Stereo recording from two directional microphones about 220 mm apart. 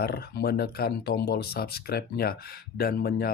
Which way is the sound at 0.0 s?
45° left (ahead or behind).